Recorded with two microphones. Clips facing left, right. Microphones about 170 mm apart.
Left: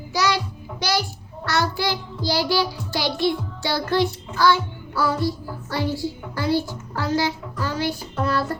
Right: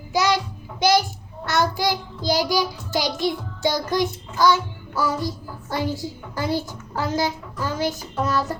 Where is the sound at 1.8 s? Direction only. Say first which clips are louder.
Right 2 dB; 15° right (ahead or behind).